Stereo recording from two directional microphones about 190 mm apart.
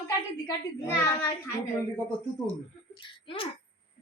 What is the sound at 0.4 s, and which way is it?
Speech, 15° left (ahead or behind).